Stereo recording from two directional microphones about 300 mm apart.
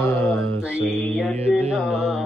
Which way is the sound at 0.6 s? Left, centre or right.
Centre.